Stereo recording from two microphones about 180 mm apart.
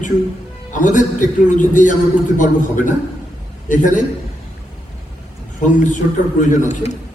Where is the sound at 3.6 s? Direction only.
45° left (ahead or behind).